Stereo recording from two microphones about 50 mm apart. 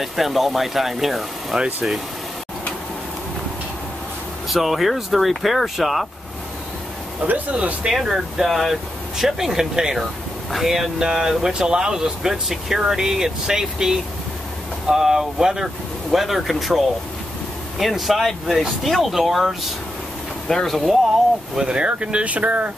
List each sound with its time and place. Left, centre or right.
0.0 s speech: centre
4.5 s speech: centre
7.8 s speech: centre
21.5 s speech: centre